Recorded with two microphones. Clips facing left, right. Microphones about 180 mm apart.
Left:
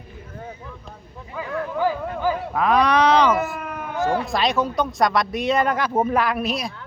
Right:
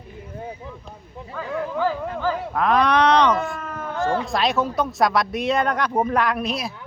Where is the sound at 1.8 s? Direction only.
15° left (ahead or behind).